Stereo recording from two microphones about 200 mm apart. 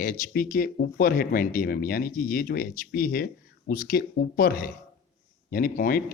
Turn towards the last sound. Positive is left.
turn(degrees=45)  # may be behind; listen again after turning